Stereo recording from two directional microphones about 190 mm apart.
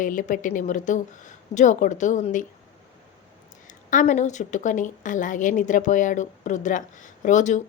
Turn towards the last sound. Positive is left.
turn(degrees=40)  # may be behind; listen again after turning